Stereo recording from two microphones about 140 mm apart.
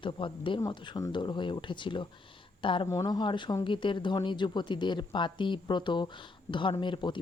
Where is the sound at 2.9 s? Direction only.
25° left (ahead or behind).